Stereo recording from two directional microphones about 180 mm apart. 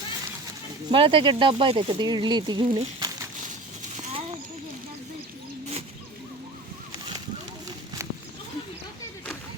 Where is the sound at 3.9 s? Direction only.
35° right (ahead or behind).